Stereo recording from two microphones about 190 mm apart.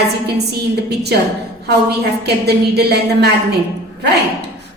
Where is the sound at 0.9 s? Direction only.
60° right (ahead or behind).